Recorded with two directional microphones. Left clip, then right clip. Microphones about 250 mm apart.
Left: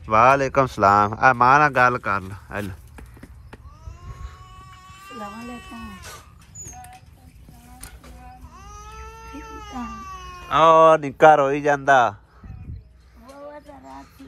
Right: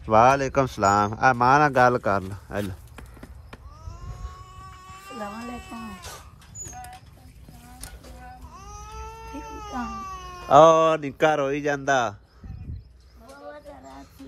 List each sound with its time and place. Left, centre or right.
0.0 s speech: centre
4.5 s a sound: right
5.4 s speech: right
8.5 s cat: right
10.5 s speech: centre